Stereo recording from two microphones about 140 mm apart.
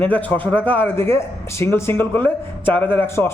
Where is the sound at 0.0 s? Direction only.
10° left (ahead or behind).